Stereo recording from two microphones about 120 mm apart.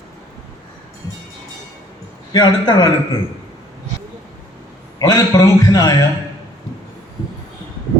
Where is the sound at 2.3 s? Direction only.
35° left (ahead or behind).